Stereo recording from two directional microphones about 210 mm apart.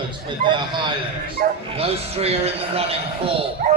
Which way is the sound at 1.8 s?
30° right (ahead or behind).